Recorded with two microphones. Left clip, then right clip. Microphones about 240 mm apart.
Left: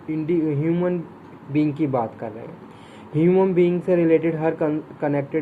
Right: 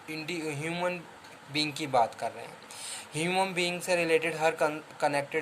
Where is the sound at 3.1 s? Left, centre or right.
Right.